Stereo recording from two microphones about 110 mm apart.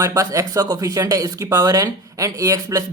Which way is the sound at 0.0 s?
30° right (ahead or behind).